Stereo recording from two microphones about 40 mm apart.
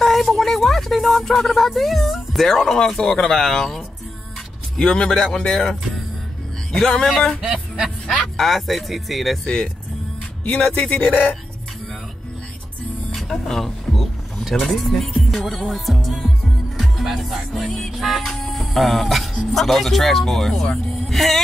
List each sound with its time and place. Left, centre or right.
0.0 s a sound: centre
1.3 s speech: centre
3.0 s speech: left
5.4 s music: centre
7.1 s speech: centre
7.4 s music: right
8.2 s speech: centre
9.4 s music: left
10.4 s speech: left
13.1 s a sound: centre
14.4 s speech: centre
16.7 s music: centre
18.2 s music: centre
19.5 s speech: centre